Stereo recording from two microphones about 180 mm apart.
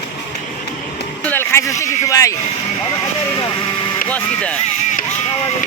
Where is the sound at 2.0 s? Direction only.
20° left (ahead or behind).